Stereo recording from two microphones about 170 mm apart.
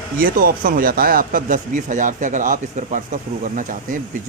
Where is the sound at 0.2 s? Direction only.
55° right (ahead or behind).